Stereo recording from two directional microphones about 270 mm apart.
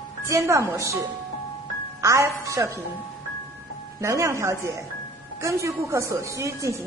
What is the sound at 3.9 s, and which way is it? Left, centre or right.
A woman's voice, centre.